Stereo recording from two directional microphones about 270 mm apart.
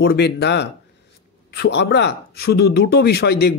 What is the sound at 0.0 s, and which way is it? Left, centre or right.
A man's voice, left.